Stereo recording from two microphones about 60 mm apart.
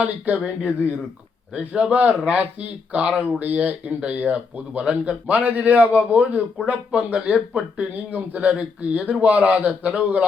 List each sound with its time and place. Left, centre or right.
0.0 s speech: right